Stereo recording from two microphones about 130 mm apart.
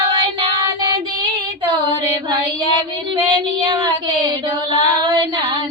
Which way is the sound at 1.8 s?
35° right (ahead or behind).